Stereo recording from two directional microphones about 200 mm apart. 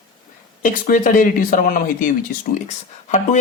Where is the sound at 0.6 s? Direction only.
40° left (ahead or behind).